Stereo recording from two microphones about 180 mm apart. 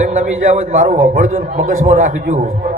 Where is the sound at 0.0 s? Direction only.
40° right (ahead or behind).